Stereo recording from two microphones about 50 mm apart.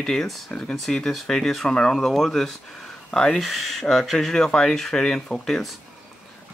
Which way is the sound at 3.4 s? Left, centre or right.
Centre.